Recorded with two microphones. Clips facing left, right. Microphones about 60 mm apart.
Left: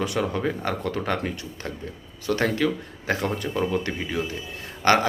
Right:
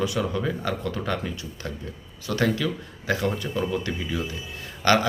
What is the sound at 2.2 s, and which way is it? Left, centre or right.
Speech, left.